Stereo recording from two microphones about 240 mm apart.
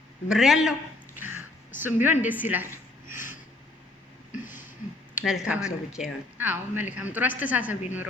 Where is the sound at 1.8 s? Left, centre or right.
Centre.